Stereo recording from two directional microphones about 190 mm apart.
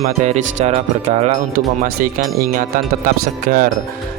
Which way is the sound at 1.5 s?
50° right (ahead or behind).